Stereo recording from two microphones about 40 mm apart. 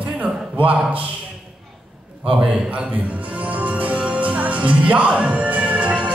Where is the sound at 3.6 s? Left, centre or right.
Right.